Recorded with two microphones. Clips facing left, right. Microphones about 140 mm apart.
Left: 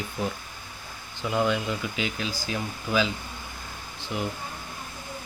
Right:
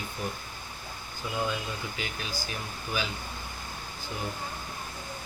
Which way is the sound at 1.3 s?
75° left (ahead or behind).